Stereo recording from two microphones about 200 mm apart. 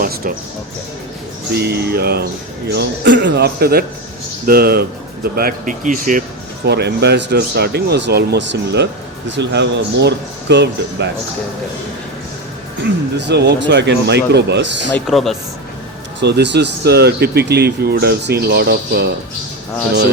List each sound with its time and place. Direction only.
0.0 s music: 50° right (ahead or behind)
1.5 s speech: 55° right (ahead or behind)
2.7 s a man's voice: 60° right (ahead or behind); by 6.2 s 40° right (ahead or behind)
6.7 s a man's voice: 55° right (ahead or behind)
13.1 s a man's voice: 60° right (ahead or behind)
14.9 s speech: centre (ahead or behind)
16.2 s a man's voice: 60° right (ahead or behind)